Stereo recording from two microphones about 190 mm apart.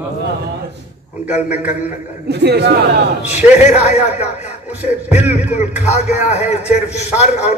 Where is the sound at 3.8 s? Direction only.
35° left (ahead or behind).